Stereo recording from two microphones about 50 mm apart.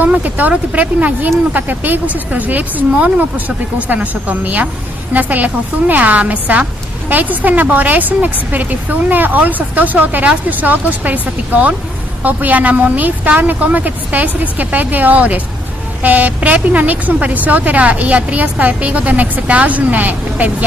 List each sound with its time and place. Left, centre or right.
0.0 s a woman's voice: right